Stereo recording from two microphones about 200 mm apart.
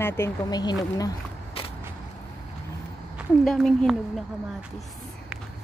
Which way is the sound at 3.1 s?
Centre (ahead or behind).